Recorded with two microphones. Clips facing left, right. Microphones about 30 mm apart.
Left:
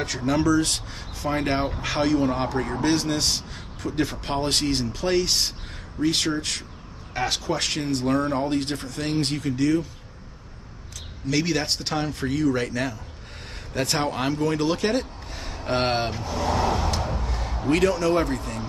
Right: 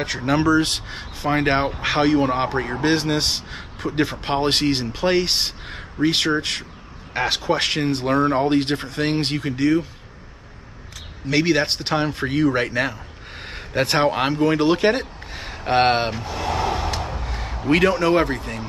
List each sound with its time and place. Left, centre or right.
0.0 s speech: right
11.2 s speech: right
16.3 s vehicle: right
16.9 s a sound: right